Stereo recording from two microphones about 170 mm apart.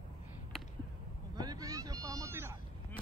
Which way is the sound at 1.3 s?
25° right (ahead or behind).